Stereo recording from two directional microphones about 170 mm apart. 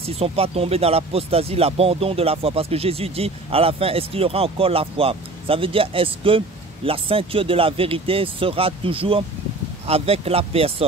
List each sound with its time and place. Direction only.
0.0 s speech: 35° right (ahead or behind)